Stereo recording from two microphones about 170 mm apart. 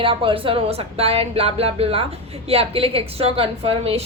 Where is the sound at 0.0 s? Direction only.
30° right (ahead or behind).